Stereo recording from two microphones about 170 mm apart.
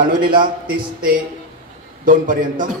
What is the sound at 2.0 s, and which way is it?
Speech, 50° right (ahead or behind).